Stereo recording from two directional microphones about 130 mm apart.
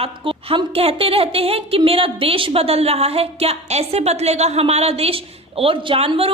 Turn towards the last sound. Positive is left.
turn(degrees=-45)  # may be behind; listen again after turning